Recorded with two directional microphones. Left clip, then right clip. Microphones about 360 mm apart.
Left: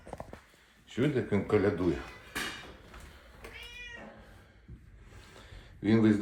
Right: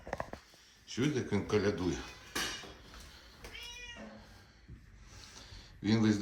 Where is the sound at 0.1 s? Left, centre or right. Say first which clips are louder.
Right 4 dB; centre.